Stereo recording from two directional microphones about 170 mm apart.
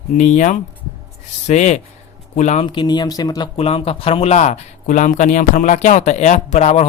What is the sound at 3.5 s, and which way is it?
Speech, 35° left (ahead or behind).